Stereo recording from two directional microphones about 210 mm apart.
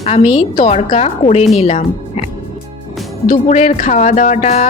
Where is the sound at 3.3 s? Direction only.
35° left (ahead or behind).